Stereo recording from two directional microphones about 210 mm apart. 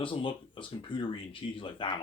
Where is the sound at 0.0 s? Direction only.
25° left (ahead or behind).